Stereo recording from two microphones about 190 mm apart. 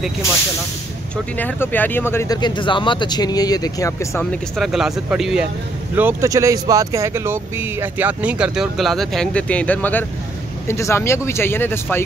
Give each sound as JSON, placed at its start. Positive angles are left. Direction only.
{"t": 1.1, "sound": "speech", "side_deg": 10}
{"t": 4.2, "sound": "speech", "side_deg": 0}
{"t": 5.9, "sound": "speech", "side_deg": -15}